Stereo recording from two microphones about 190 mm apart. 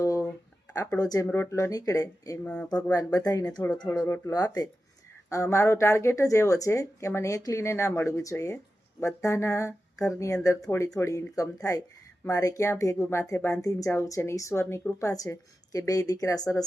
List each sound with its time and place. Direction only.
0.0 s a sound: 15° left (ahead or behind)
0.9 s speech: 20° left (ahead or behind)
2.5 s speech: 5° left (ahead or behind)
2.9 s speech: 20° left (ahead or behind)